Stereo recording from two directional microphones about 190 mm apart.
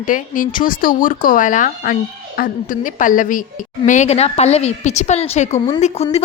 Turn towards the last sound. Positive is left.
turn(degrees=35)  # may be behind; listen again after turning